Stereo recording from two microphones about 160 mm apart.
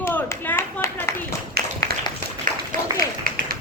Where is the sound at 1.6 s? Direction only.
80° right.